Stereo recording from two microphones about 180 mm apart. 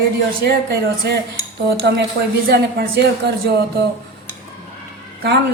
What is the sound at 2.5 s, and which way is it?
Speech, 60° right (ahead or behind).